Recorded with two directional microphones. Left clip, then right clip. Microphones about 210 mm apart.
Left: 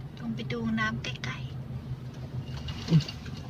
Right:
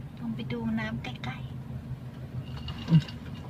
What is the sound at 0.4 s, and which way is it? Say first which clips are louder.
Music: left 4 dB; 15° right (ahead or behind).